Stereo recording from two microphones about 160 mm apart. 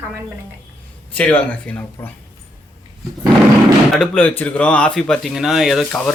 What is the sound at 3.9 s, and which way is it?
Speech, 5° left (ahead or behind).